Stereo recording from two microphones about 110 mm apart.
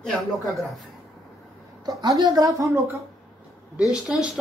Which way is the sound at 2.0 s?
40° right (ahead or behind).